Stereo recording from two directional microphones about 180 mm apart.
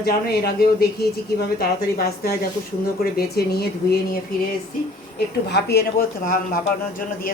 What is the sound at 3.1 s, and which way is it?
Speech, 60° left (ahead or behind).